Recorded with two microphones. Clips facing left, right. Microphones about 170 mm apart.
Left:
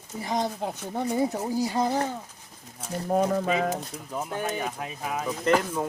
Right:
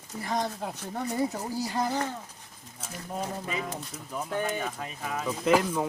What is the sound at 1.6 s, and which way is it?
Speech, 20° left (ahead or behind).